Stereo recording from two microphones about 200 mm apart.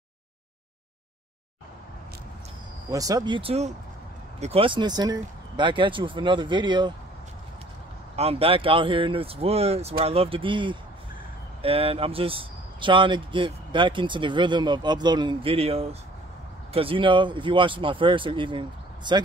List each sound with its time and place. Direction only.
2.9 s speech: 20° right (ahead or behind)
8.2 s speech: 30° right (ahead or behind)